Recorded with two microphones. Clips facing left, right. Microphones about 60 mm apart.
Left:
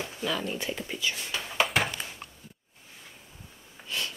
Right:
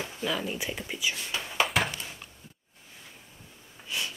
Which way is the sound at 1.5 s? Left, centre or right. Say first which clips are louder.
Even; centre.